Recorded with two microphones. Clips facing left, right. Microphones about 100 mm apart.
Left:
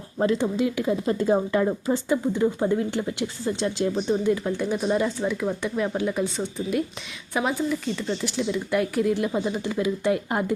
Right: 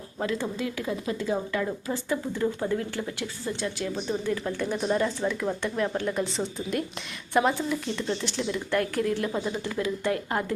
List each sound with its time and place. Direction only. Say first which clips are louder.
0.2 s a woman's voice: left 7 dB; 25° left (ahead or behind)
1.0 s a woman's voice: left 7 dB; 40° left (ahead or behind)
3.9 s speech: left 6 dB; 10° left (ahead or behind)